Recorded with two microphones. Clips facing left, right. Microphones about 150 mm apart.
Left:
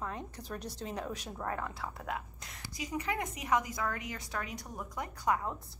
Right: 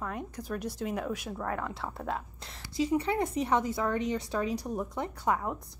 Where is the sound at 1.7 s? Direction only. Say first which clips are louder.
Right 4 dB; 25° right (ahead or behind).